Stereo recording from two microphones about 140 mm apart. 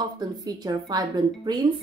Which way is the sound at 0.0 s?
30° right (ahead or behind).